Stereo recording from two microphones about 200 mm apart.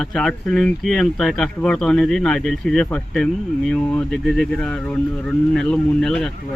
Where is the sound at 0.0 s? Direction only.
Centre (ahead or behind).